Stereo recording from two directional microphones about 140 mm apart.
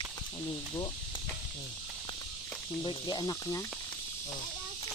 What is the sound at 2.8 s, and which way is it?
Cricket, 30° left (ahead or behind).